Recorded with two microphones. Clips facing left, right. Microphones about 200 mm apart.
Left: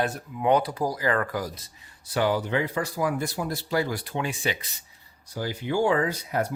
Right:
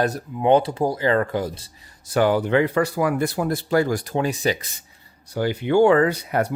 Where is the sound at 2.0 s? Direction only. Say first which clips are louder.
Right 6 dB; 50° right (ahead or behind).